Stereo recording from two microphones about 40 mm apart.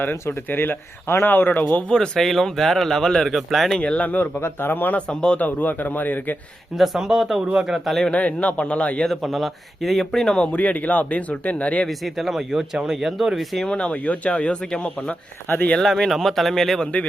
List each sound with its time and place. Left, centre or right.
0.0 s speech: left
1.3 s a man's voice: left
1.9 s speech: centre
3.8 s speech: left
4.1 s speech: left
4.9 s speech: left
5.4 s a man's voice: left
6.7 s speech: centre
8.1 s speech: left
9.0 s speech: centre
10.3 s speech: left
11.9 s speech: centre
13.7 s speech: left
15.8 s speech: centre